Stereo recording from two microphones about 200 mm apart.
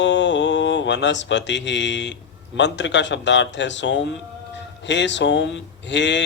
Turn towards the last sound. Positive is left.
turn(degrees=65)  # may be behind; listen again after turning